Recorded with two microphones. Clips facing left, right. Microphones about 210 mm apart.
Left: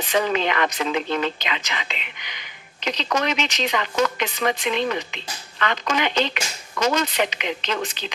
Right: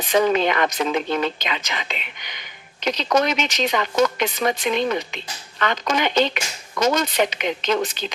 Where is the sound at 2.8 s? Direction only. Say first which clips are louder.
Right 4 dB; 45° right (ahead or behind).